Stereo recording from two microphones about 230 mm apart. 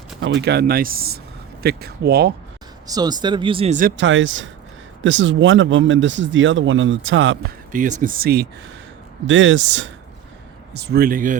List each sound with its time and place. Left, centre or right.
0.2 s speech: right
2.8 s speech: centre; by 3.9 s right
3.9 s speech: right
7.7 s speech: right
9.2 s speech: right